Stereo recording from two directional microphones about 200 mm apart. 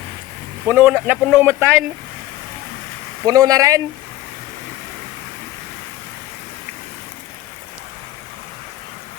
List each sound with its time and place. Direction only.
0.7 s speech: 10° right (ahead or behind)
3.2 s speech: 15° right (ahead or behind)